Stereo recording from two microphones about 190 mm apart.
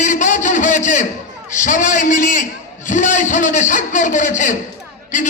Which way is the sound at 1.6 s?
40° left (ahead or behind).